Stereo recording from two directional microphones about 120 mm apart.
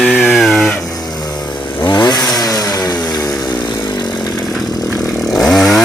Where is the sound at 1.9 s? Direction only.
35° left (ahead or behind).